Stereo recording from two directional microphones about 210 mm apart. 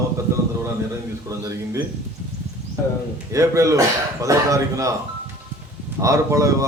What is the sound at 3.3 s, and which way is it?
A man's voice, 15° right (ahead or behind).